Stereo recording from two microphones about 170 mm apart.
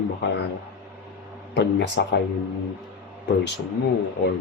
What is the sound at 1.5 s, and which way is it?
Speech, 90° left.